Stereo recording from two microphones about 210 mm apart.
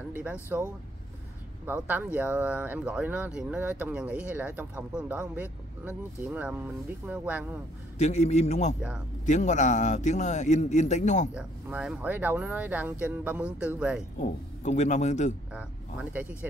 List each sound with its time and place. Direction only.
0.1 s speech: 10° right (ahead or behind)
1.7 s speech: 10° right (ahead or behind)
8.0 s a man's voice: 30° left (ahead or behind)
11.3 s speech: 5° right (ahead or behind)
14.2 s a man's voice: 35° left (ahead or behind)
15.5 s speech: 5° right (ahead or behind)